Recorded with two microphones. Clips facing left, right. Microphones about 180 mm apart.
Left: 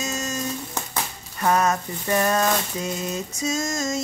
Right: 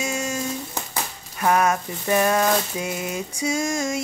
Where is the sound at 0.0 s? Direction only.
10° right (ahead or behind).